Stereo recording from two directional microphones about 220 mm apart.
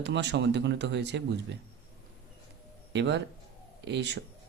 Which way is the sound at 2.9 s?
50° right (ahead or behind).